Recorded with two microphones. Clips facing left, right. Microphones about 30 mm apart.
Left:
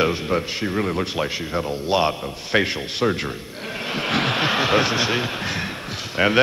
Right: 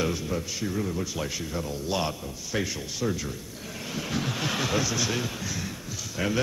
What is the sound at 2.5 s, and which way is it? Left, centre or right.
Speech, left.